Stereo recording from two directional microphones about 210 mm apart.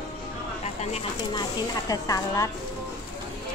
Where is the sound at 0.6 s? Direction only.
30° left (ahead or behind).